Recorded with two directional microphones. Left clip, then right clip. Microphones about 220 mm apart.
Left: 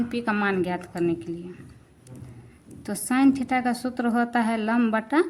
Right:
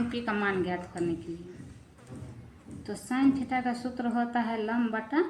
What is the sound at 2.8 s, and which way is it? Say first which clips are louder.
A woman's voice: left 6 dB; 40° left (ahead or behind).